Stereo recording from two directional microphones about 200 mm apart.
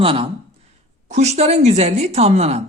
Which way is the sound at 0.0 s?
25° right (ahead or behind).